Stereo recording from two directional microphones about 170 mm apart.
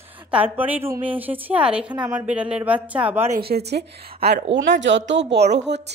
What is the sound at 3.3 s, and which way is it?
A woman's voice, 70° right (ahead or behind).